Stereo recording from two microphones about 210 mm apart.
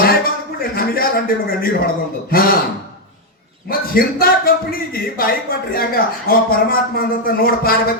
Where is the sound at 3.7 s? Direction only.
45° left (ahead or behind).